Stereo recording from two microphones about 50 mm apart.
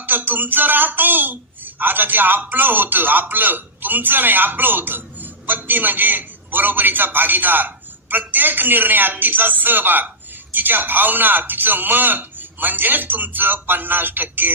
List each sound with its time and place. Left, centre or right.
0.0 s a woman's voice: right